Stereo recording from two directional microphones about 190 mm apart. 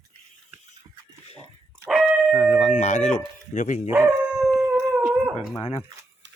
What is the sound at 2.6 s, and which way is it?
Speech, 40° left (ahead or behind).